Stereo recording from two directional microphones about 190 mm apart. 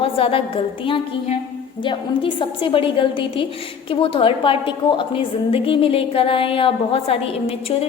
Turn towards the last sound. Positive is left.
turn(degrees=30)  # may be behind; listen again after turning